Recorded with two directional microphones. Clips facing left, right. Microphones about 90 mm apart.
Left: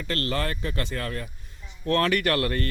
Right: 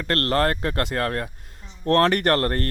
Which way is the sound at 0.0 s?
60° right (ahead or behind).